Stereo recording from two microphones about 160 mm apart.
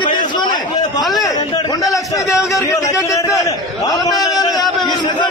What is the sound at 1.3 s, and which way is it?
A man's voice, 20° left (ahead or behind).